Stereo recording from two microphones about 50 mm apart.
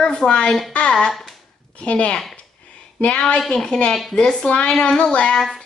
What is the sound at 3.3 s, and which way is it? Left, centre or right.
Speech, centre.